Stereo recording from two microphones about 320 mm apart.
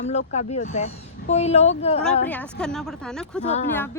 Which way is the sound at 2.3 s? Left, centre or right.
Centre.